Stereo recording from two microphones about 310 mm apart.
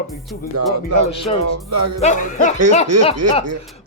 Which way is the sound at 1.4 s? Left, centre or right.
Right.